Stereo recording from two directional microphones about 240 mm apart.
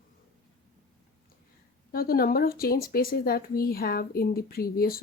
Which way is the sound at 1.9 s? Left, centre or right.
Left.